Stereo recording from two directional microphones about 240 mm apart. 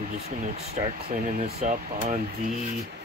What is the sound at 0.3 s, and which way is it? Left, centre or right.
Speech, right.